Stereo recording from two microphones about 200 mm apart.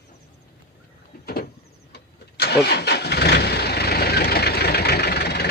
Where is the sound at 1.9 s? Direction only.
55° left (ahead or behind).